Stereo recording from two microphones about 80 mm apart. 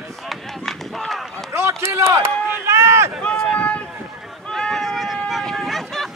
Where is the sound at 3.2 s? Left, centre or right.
Centre.